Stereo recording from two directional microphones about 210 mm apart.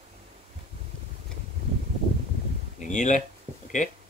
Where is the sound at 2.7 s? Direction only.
35° left (ahead or behind).